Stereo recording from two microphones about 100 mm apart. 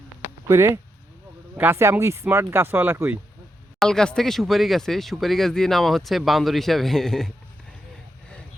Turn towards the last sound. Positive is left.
turn(degrees=5)  # may be behind; listen again after turning